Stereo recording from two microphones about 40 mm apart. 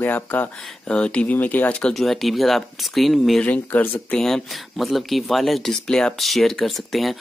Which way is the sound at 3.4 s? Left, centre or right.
Left.